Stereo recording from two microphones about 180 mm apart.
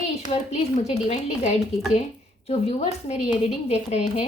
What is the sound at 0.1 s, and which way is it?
A woman's voice, 35° left (ahead or behind).